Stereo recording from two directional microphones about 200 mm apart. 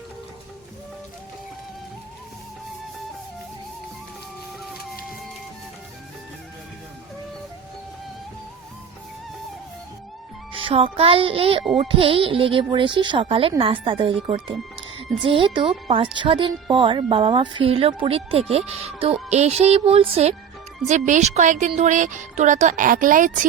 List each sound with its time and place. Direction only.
10.5 s speech: 25° right (ahead or behind); by 23.5 s 40° right (ahead or behind)